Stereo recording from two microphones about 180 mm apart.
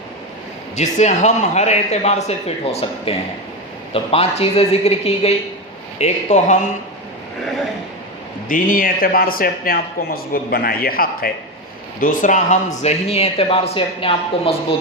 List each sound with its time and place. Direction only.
0.8 s speech: 40° left (ahead or behind)
8.4 s speech: 50° left (ahead or behind)
12.8 s speech: 35° left (ahead or behind)